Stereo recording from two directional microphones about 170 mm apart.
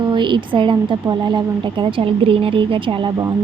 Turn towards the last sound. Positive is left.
turn(degrees=-25)  # may be behind; listen again after turning